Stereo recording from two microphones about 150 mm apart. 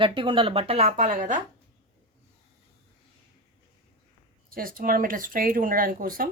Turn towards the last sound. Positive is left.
turn(degrees=-70)  # may be behind; listen again after turning